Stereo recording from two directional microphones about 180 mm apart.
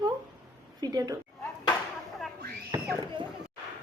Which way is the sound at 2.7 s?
20° right (ahead or behind).